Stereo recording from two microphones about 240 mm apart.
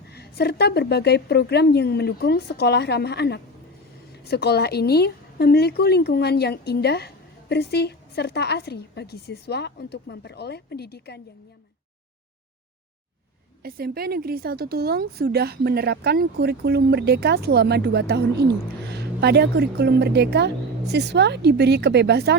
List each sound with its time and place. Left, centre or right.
0.1 s a woman's voice: left
13.6 s a woman's voice: right